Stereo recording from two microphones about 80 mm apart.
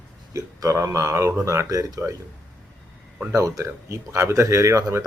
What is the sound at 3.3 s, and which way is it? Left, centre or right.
Speech, right.